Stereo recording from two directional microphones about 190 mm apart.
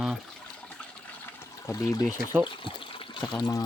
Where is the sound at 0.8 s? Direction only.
10° left (ahead or behind); by 3.2 s 25° left (ahead or behind).